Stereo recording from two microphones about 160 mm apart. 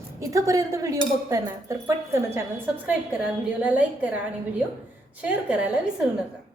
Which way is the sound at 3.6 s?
10° right (ahead or behind).